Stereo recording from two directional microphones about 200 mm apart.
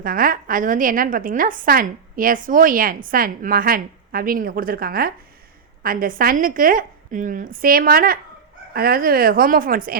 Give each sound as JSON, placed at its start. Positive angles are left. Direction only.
{"t": 0.0, "sound": "a woman's voice", "side_deg": -45}